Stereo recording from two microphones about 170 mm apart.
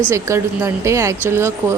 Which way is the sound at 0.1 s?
15° right (ahead or behind).